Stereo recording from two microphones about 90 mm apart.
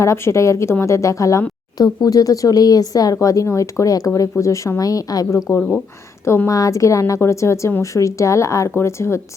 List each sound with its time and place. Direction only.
0.0 s speech: 35° left (ahead or behind)
6.2 s a woman's voice: 25° left (ahead or behind)
6.5 s speech: 40° left (ahead or behind)